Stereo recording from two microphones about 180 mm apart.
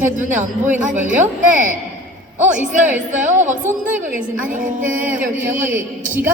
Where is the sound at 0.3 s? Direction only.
45° right (ahead or behind).